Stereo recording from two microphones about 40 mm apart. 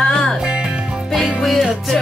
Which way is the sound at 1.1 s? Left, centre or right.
Centre.